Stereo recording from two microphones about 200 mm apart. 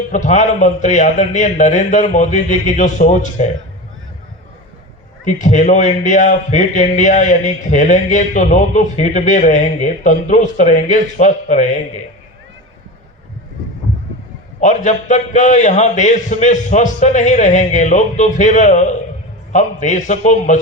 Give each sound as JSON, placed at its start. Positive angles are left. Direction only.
{"t": 0.1, "sound": "a man's voice", "side_deg": 35}
{"t": 5.2, "sound": "a man's voice", "side_deg": 40}
{"t": 14.6, "sound": "a man's voice", "side_deg": 40}